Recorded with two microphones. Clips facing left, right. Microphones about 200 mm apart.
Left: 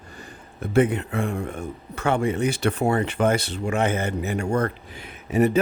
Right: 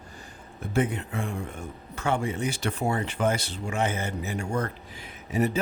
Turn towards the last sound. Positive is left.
turn(degrees=65)  # may be behind; listen again after turning